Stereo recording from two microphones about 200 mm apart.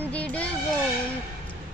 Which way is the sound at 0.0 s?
5° left (ahead or behind).